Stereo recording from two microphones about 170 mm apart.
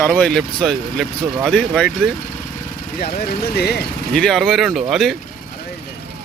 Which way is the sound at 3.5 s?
70° left (ahead or behind).